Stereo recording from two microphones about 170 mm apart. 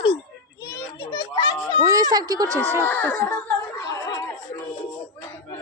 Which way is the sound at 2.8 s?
10° left (ahead or behind).